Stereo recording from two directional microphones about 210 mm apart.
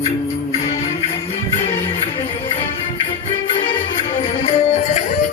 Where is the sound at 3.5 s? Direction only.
25° left (ahead or behind).